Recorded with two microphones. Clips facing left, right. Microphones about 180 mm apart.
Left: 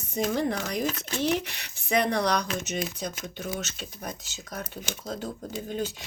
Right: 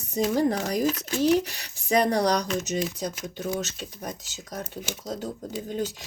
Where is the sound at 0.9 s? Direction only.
5° right (ahead or behind).